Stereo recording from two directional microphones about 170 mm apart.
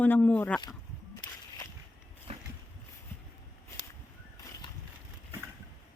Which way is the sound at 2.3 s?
35° right (ahead or behind).